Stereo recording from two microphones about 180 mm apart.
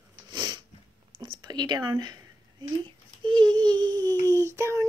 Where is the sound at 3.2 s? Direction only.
25° right (ahead or behind).